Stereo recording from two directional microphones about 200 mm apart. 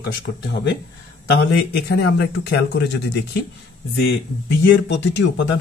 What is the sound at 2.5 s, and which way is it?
Speech, 60° left (ahead or behind).